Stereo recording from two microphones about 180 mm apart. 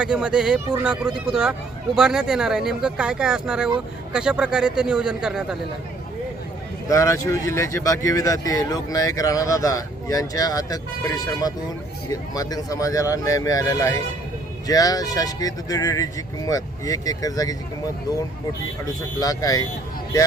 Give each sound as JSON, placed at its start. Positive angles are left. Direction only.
{"t": 0.0, "sound": "speech", "side_deg": -5}
{"t": 6.8, "sound": "speech", "side_deg": 15}
{"t": 19.2, "sound": "speech", "side_deg": 20}